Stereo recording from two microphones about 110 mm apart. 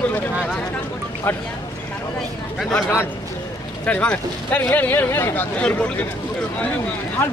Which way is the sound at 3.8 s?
10° left (ahead or behind).